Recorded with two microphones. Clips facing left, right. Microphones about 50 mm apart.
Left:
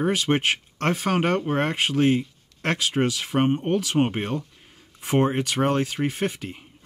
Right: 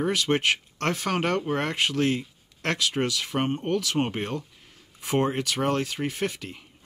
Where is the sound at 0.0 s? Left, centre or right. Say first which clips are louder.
Left 2 dB; left.